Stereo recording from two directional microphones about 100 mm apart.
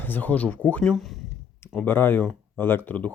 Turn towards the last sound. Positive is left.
turn(degrees=15)  # may be behind; listen again after turning